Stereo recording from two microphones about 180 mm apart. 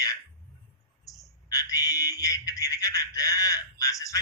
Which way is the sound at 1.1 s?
20° left (ahead or behind).